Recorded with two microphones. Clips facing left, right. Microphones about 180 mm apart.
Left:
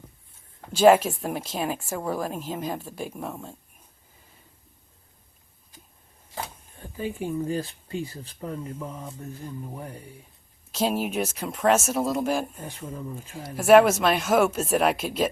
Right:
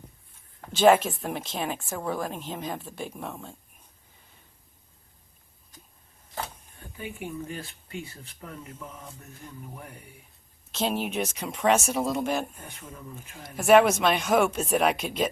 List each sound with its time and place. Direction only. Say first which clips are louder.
0.7 s a woman's voice: left 2 dB; 10° left (ahead or behind)
6.9 s speech: left 7 dB; 35° left (ahead or behind)
10.7 s speech: left 3 dB; 5° left (ahead or behind)
12.5 s speech: left 7 dB; 25° left (ahead or behind)
13.1 s speech: left 4 dB; 10° left (ahead or behind)